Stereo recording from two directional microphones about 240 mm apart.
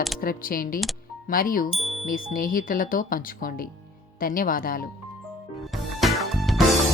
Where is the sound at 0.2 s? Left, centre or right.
Left.